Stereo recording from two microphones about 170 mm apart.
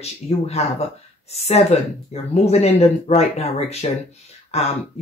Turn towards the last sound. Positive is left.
turn(degrees=40)  # may be behind; listen again after turning